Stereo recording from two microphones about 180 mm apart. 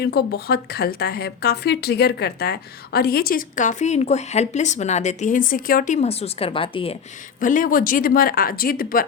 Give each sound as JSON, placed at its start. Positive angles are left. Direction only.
{"t": 0.0, "sound": "a woman's voice", "side_deg": 60}
{"t": 7.3, "sound": "a woman's voice", "side_deg": 50}